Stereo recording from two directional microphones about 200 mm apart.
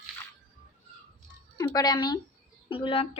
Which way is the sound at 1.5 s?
20° left (ahead or behind).